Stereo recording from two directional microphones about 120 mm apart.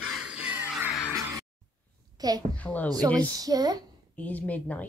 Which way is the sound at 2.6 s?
15° left (ahead or behind).